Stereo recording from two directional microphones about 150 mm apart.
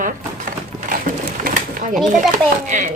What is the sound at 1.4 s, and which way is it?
Pigeon, 60° right (ahead or behind).